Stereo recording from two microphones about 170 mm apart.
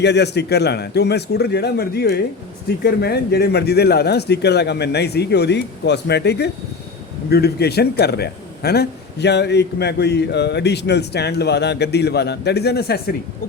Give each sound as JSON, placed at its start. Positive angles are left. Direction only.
{"t": 0.0, "sound": "a man's voice", "side_deg": 80}